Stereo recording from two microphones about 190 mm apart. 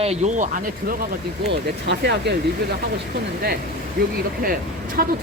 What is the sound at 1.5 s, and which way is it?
Speech, 60° right (ahead or behind).